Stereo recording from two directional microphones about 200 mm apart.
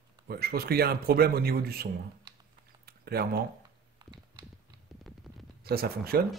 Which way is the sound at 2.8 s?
50° right (ahead or behind).